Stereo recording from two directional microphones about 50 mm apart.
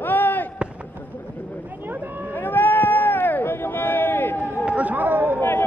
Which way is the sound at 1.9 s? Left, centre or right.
Right.